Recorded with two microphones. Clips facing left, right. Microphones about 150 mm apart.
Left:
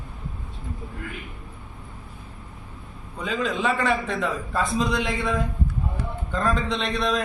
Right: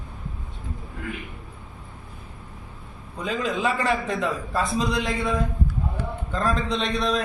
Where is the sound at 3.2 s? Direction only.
Centre (ahead or behind).